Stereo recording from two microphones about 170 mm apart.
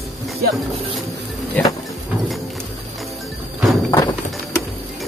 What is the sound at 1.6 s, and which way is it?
Speech, 10° left (ahead or behind).